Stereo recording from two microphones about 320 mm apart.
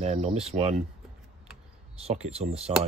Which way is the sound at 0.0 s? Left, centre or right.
Centre.